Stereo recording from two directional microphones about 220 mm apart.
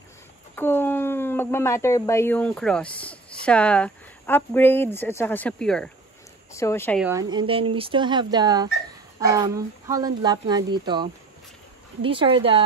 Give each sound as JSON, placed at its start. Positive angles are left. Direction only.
{"t": 0.6, "sound": "speech", "side_deg": 10}
{"t": 7.0, "sound": "speech", "side_deg": -10}